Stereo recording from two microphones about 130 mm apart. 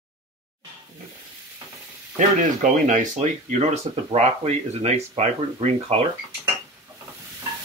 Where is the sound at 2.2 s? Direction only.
90° right; by 6.1 s 55° right (ahead or behind).